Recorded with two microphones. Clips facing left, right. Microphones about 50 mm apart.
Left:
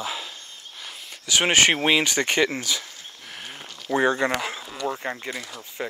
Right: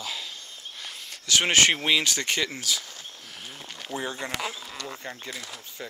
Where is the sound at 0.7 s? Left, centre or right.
Centre.